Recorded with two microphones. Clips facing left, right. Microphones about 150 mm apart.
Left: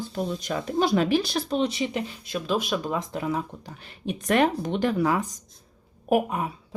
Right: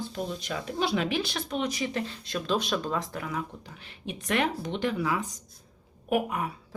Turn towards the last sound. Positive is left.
turn(degrees=35)  # may be behind; listen again after turning